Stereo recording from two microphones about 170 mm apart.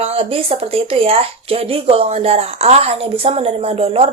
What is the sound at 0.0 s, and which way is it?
A woman's voice, 35° right (ahead or behind).